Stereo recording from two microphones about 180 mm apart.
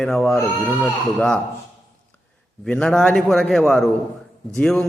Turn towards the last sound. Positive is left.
turn(degrees=5)  # may be behind; listen again after turning